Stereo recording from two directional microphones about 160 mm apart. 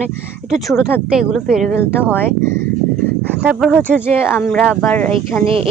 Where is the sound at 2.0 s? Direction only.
15° left (ahead or behind).